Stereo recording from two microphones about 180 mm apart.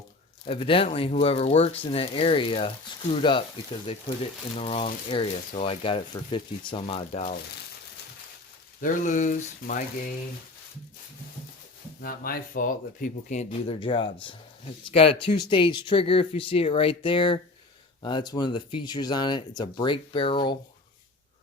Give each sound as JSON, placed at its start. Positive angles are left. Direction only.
{"t": 0.4, "sound": "speech", "side_deg": 30}
{"t": 8.8, "sound": "speech", "side_deg": 45}
{"t": 11.9, "sound": "speech", "side_deg": 55}